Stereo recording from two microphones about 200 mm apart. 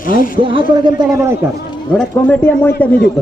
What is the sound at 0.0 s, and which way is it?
Speech, 45° left (ahead or behind).